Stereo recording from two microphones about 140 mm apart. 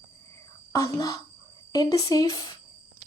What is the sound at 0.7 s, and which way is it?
Speech, 20° left (ahead or behind).